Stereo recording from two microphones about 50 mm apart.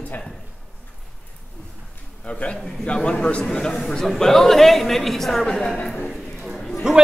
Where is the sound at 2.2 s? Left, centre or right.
Left; by 5.7 s centre.